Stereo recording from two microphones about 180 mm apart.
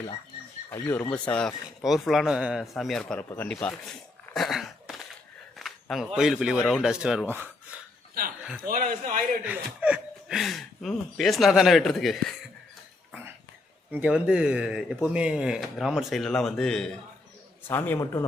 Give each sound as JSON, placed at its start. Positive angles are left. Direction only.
{"t": 0.7, "sound": "a man's voice", "side_deg": 10}
{"t": 4.4, "sound": "a sound", "side_deg": 0}
{"t": 6.1, "sound": "speech", "side_deg": 0}
{"t": 8.7, "sound": "a man's voice", "side_deg": -50}
{"t": 9.4, "sound": "speech", "side_deg": -5}
{"t": 13.9, "sound": "a man's voice", "side_deg": -5}